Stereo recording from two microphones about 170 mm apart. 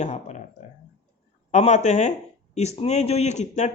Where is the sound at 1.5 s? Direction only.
40° left (ahead or behind).